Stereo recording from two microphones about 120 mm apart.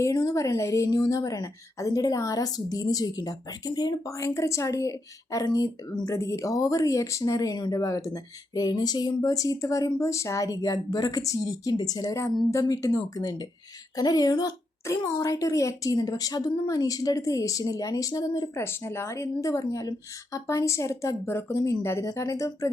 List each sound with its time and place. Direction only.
0.0 s a woman's voice: 30° left (ahead or behind)